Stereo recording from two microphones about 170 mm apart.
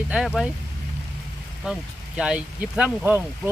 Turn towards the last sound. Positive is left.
turn(degrees=-10)  # may be behind; listen again after turning